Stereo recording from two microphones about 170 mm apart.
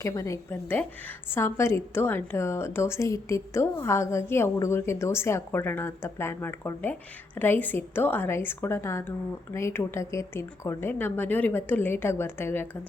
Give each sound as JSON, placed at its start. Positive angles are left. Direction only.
{"t": 0.0, "sound": "a woman's voice", "side_deg": 20}